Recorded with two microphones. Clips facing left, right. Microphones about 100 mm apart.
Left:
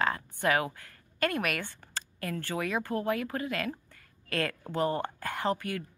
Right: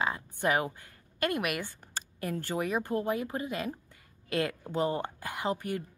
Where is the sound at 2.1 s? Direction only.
20° right (ahead or behind).